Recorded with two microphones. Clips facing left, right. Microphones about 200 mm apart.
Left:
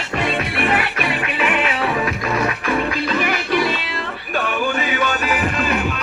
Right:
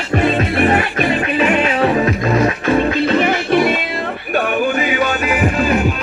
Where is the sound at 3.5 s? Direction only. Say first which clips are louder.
Right 5 dB; 50° right (ahead or behind).